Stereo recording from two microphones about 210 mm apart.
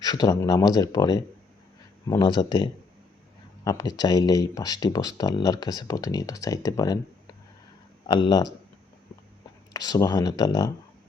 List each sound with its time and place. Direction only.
0.0 s speech: 20° left (ahead or behind)
9.7 s speech: 20° left (ahead or behind)